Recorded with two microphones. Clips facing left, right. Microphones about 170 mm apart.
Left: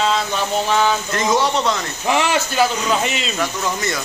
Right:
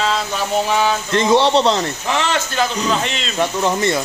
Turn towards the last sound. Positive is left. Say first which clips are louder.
# right 5 dB
turn(degrees=-25)  # may be behind; listen again after turning